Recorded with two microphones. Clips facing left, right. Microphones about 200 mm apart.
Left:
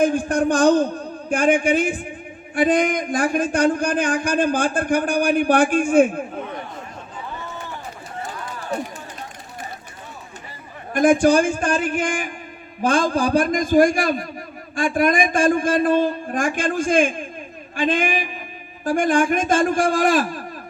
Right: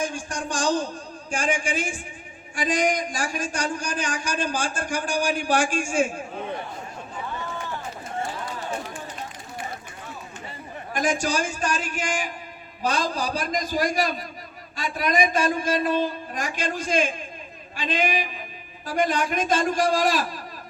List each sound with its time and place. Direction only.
0.0 s speech: 55° left (ahead or behind)
10.9 s a man's voice: 55° left (ahead or behind)